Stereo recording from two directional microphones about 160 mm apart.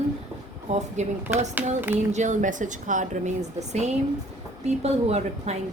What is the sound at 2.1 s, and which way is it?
Speech, 50° right (ahead or behind).